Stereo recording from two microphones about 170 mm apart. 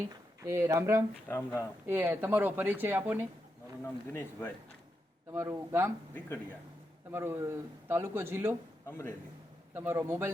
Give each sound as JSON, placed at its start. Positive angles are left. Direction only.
{"t": 0.4, "sound": "a man's voice", "side_deg": -15}
{"t": 1.3, "sound": "speech", "side_deg": 10}
{"t": 1.9, "sound": "a man's voice", "side_deg": -10}
{"t": 4.1, "sound": "speech", "side_deg": 10}
{"t": 5.3, "sound": "a man's voice", "side_deg": -15}
{"t": 6.1, "sound": "speech", "side_deg": 15}
{"t": 7.1, "sound": "a man's voice", "side_deg": -15}
{"t": 8.9, "sound": "speech", "side_deg": 15}
{"t": 9.7, "sound": "a man's voice", "side_deg": -10}